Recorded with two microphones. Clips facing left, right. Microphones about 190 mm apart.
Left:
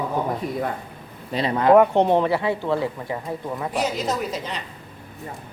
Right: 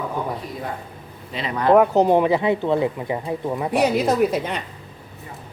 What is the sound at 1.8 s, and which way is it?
Speech, 5° right (ahead or behind).